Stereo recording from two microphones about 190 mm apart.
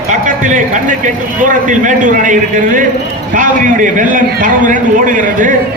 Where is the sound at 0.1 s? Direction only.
40° right (ahead or behind).